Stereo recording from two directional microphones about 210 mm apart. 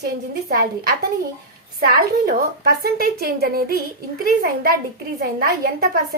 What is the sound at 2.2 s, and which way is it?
A woman's voice, 45° right (ahead or behind).